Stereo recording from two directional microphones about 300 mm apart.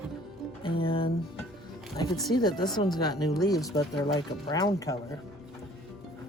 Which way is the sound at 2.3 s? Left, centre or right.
Centre.